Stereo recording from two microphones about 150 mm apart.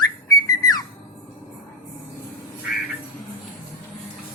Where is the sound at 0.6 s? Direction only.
25° left (ahead or behind).